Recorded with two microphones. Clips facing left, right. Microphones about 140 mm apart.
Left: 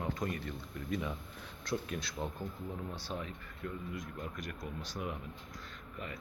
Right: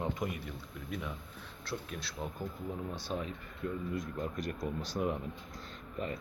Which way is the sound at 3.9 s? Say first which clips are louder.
Right 5 dB; 35° right (ahead or behind).